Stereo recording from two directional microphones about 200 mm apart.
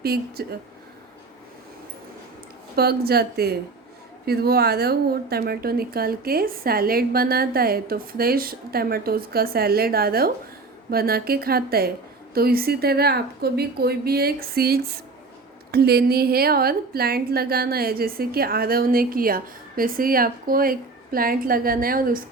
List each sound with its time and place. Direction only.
0.0 s a woman's voice: 50° right (ahead or behind)
2.7 s a woman's voice: 50° right (ahead or behind)